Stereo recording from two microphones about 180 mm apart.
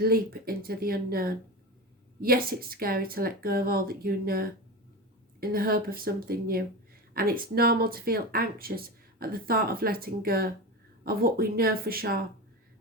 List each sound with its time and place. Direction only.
0.0 s speech: 55° right (ahead or behind)